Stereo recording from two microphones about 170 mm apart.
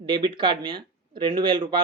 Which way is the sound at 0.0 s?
25° right (ahead or behind).